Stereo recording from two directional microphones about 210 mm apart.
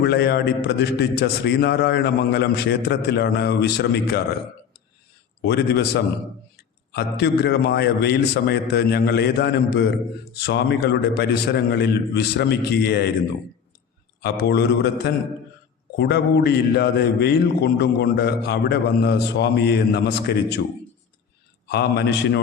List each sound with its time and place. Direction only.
0.0 s a man's voice: 50° left (ahead or behind)
5.5 s a man's voice: 50° left (ahead or behind)
14.2 s a man's voice: 50° left (ahead or behind)
21.7 s a man's voice: 50° left (ahead or behind)